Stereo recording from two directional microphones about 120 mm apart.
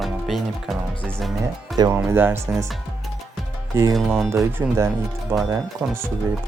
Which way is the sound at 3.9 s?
Centre (ahead or behind).